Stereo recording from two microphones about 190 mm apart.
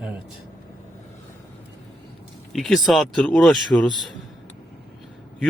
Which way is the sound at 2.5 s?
Centre (ahead or behind).